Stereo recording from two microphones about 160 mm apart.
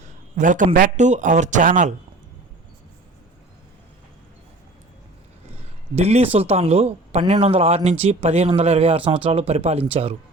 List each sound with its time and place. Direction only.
0.3 s a man's voice: 55° right (ahead or behind)
6.0 s speech: 40° right (ahead or behind)